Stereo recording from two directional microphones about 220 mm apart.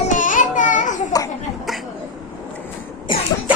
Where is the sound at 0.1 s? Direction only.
35° left (ahead or behind).